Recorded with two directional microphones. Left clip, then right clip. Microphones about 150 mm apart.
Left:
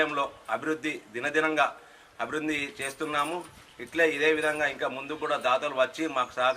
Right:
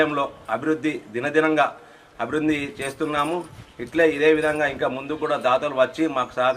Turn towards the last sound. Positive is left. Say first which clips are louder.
# right 5 dB
turn(degrees=-15)  # may be behind; listen again after turning